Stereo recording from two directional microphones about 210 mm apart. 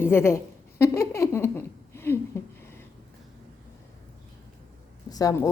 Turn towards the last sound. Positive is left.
turn(degrees=15)  # may be behind; listen again after turning